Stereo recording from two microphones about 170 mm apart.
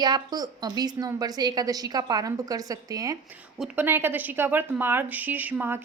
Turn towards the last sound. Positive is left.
turn(degrees=-10)  # may be behind; listen again after turning